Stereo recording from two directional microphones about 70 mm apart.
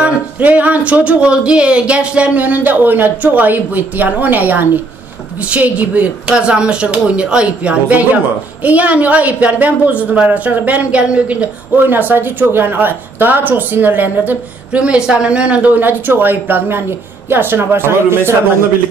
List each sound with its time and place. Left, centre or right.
0.0 s a woman's voice: centre